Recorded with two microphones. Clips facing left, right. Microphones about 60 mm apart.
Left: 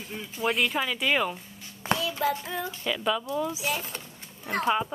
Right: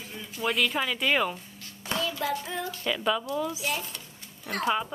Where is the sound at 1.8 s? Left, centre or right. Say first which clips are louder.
Left 4 dB; left.